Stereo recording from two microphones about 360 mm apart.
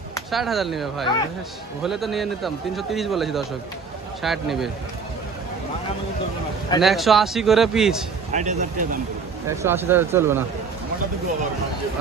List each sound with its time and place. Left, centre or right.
0.1 s a man's voice: centre
6.8 s a man's voice: centre
8.3 s speech: centre
9.5 s speech: centre